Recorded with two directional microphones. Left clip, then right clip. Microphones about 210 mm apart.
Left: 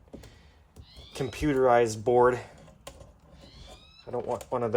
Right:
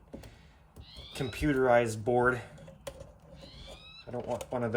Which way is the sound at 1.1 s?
30° left (ahead or behind).